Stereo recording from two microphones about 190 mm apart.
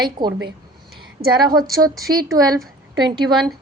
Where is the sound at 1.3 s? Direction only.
20° right (ahead or behind).